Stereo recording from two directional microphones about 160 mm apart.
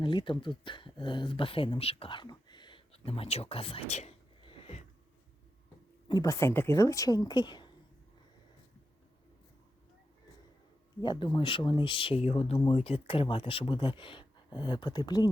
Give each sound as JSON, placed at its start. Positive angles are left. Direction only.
{"t": 0.0, "sound": "speech", "side_deg": 30}
{"t": 6.1, "sound": "a woman's voice", "side_deg": 25}
{"t": 11.0, "sound": "speech", "side_deg": 30}